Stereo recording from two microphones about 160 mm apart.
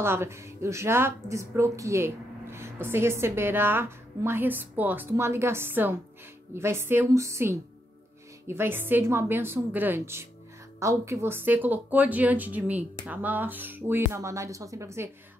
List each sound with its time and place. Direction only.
0.0 s speech: 15° right (ahead or behind)